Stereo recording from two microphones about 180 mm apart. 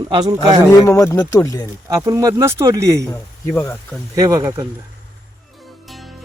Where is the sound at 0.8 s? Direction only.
15° left (ahead or behind).